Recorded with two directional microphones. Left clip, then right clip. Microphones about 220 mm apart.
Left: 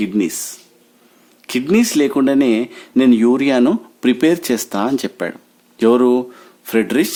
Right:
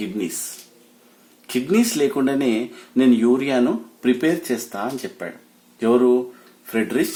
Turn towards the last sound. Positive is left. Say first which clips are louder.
# left 5 dB
turn(degrees=40)  # may be behind; listen again after turning